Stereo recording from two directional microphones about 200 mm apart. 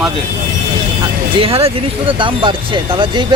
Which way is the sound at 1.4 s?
30° right (ahead or behind).